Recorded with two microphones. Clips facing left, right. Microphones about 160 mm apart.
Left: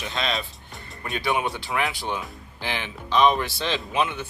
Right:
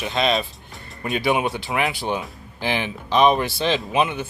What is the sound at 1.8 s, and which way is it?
Speech, 5° right (ahead or behind).